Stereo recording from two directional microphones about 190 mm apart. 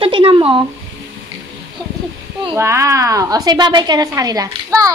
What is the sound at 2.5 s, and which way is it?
A woman's voice, 15° right (ahead or behind).